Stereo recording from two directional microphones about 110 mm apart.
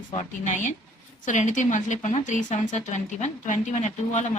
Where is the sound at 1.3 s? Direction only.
90° left.